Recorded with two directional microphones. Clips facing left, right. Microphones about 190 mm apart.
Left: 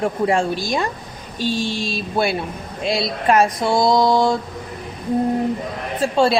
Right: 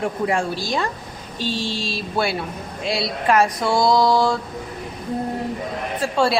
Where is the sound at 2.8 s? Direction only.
20° left (ahead or behind).